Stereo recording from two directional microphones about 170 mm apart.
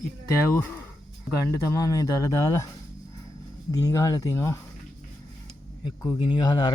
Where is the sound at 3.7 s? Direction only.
20° left (ahead or behind).